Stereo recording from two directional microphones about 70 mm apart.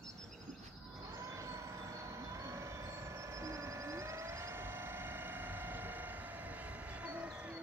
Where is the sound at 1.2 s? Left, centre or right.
Right; by 7.6 s centre.